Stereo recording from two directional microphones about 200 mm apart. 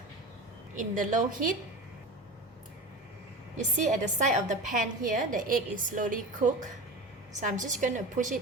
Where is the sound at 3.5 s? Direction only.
35° right (ahead or behind).